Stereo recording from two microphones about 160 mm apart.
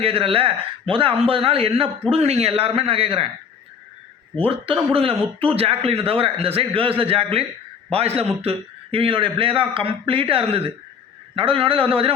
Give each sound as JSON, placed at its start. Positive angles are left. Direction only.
{"t": 0.0, "sound": "a man's voice", "side_deg": -35}
{"t": 4.4, "sound": "a man's voice", "side_deg": -35}